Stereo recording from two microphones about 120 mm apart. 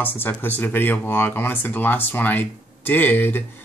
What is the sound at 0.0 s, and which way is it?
Speech, 15° left (ahead or behind).